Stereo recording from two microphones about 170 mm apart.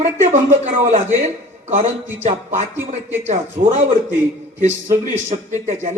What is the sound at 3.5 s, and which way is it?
A man's voice, 50° right (ahead or behind).